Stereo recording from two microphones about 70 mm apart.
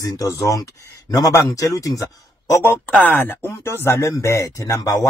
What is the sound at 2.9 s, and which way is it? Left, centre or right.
Speech, left.